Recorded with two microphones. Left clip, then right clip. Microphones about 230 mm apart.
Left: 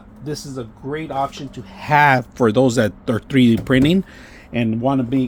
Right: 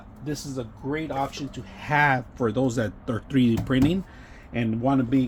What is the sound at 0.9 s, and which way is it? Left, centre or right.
Speech, left.